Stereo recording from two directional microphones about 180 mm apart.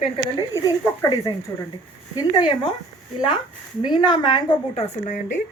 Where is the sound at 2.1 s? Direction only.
25° left (ahead or behind).